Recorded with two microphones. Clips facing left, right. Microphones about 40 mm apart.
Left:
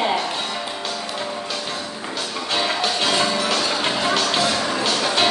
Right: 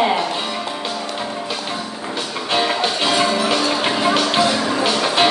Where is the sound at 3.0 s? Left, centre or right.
Centre.